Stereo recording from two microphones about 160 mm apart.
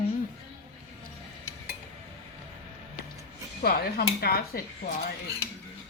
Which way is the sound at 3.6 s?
70° left (ahead or behind).